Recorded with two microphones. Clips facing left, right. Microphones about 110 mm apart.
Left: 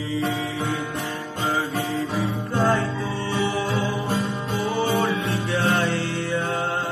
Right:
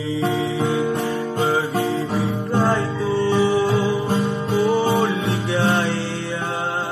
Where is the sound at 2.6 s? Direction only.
20° right (ahead or behind).